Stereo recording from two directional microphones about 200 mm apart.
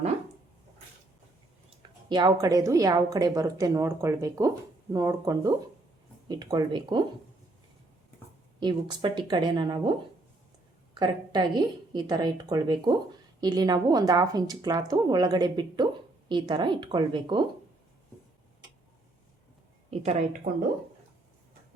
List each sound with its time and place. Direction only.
2.0 s a woman's voice: 20° right (ahead or behind)
8.6 s a woman's voice: 25° right (ahead or behind)
11.0 s a woman's voice: 20° right (ahead or behind)
19.9 s speech: 30° right (ahead or behind)